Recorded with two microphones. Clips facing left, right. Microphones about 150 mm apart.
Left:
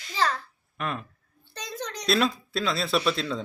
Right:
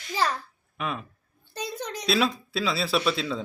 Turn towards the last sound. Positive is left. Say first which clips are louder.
# even
turn(degrees=-5)  # may be behind; listen again after turning